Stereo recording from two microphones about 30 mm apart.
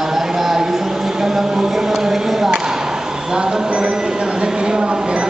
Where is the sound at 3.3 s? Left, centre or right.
Right.